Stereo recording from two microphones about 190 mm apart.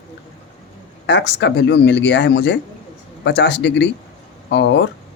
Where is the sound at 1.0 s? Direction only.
65° left (ahead or behind).